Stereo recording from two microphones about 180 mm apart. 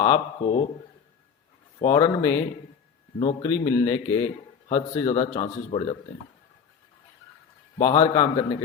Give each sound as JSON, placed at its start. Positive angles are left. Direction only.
{"t": 0.0, "sound": "a man's voice", "side_deg": 25}
{"t": 1.8, "sound": "a man's voice", "side_deg": 25}
{"t": 7.8, "sound": "a man's voice", "side_deg": 25}